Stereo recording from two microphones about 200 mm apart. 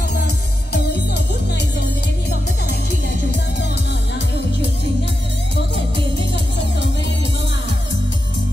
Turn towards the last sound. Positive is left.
turn(degrees=60)  # may be behind; listen again after turning